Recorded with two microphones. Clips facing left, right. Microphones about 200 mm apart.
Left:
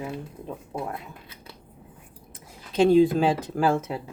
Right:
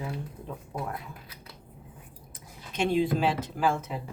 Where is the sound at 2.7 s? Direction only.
35° left (ahead or behind).